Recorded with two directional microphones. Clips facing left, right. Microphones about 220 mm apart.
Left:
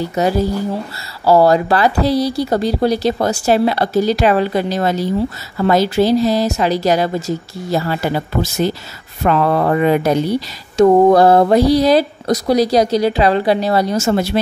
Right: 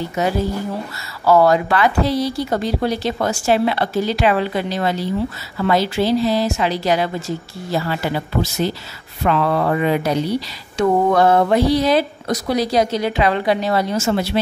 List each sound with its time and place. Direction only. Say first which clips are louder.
0.1 s speech: left 4 dB; 40° left (ahead or behind)
10.8 s speech: left 6 dB; 35° left (ahead or behind)